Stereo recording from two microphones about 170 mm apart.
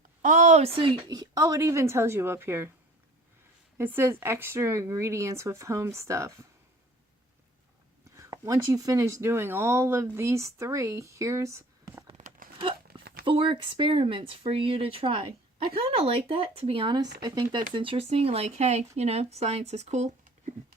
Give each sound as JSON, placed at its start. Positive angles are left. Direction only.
{"t": 0.2, "sound": "a woman's voice", "side_deg": -50}
{"t": 3.8, "sound": "speech", "side_deg": -15}
{"t": 8.1, "sound": "speech", "side_deg": -20}
{"t": 12.1, "sound": "tearing", "side_deg": -50}
{"t": 13.2, "sound": "a woman's voice", "side_deg": -30}